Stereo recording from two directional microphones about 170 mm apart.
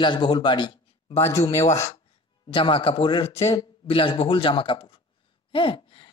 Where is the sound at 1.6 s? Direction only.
20° left (ahead or behind).